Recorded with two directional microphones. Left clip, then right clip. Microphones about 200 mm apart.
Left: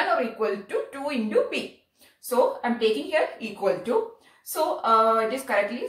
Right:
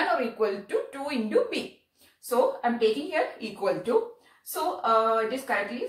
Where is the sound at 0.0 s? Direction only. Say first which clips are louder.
Left 2 dB; 15° right (ahead or behind).